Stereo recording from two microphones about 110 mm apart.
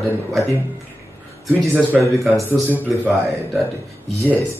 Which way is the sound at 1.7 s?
20° right (ahead or behind).